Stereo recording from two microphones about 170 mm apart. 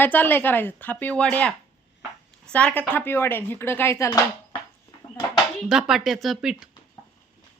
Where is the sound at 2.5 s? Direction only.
10° left (ahead or behind).